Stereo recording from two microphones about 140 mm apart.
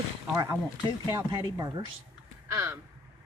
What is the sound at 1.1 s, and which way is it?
Speech, 25° right (ahead or behind).